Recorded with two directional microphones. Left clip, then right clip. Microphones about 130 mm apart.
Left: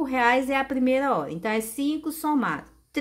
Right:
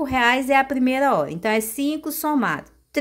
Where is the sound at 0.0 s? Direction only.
30° right (ahead or behind).